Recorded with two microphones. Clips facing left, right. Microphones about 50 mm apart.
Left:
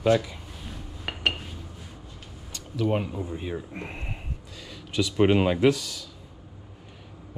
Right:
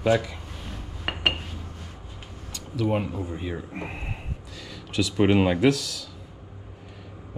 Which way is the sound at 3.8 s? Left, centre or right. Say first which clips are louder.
Right 2 dB; centre.